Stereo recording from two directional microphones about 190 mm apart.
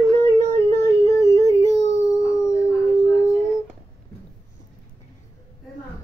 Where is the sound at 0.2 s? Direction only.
15° left (ahead or behind).